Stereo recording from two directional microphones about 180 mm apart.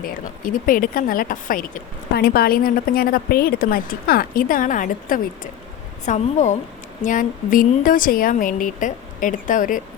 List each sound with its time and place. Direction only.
0.0 s a woman's voice: 50° left (ahead or behind)